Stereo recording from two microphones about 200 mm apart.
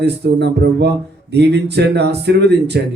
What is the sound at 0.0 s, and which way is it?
Speech, 55° right (ahead or behind).